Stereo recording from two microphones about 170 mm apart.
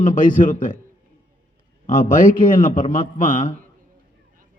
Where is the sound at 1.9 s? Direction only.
50° left (ahead or behind).